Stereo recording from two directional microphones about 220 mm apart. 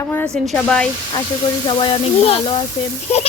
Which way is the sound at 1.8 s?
25° left (ahead or behind).